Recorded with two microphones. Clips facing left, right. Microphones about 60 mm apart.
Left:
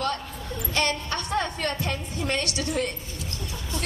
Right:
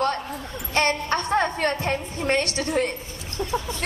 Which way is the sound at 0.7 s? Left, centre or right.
Right.